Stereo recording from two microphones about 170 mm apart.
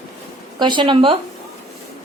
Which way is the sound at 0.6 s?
25° right (ahead or behind).